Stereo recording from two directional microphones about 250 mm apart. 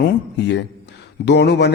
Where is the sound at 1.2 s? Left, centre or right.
Left.